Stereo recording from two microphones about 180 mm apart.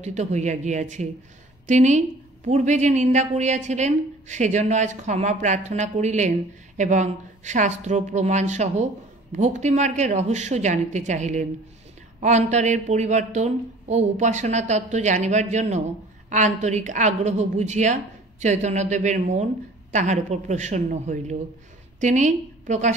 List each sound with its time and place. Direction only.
0.0 s a woman's voice: 40° right (ahead or behind)